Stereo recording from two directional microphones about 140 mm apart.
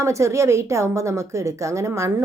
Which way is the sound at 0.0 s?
20° right (ahead or behind).